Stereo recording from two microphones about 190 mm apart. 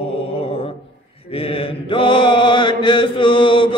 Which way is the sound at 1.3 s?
30° left (ahead or behind).